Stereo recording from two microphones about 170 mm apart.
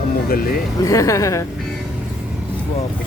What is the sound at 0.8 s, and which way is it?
Speech, 20° left (ahead or behind).